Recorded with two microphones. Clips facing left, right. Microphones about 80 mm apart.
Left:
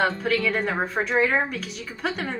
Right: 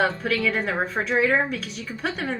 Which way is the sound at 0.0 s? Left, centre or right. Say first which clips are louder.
Even; centre.